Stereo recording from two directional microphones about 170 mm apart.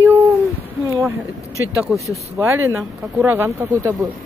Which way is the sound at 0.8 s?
20° right (ahead or behind).